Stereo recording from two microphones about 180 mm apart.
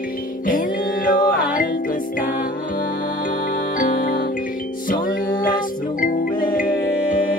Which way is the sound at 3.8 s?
50° left (ahead or behind).